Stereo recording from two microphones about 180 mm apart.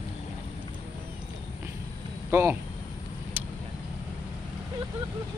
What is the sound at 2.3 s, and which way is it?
Speech, 15° right (ahead or behind).